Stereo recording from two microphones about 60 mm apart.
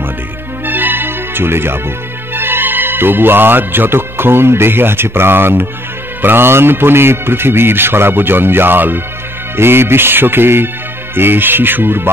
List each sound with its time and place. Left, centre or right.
0.7 s music: right
2.3 s a man's voice: right